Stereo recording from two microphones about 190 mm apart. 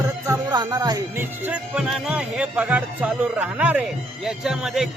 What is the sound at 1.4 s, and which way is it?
Speech, 5° right (ahead or behind).